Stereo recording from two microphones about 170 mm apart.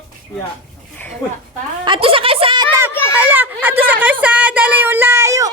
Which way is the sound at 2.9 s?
15° left (ahead or behind).